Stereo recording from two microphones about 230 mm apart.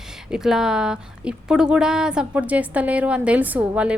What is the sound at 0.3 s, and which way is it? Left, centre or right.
A woman's voice, centre.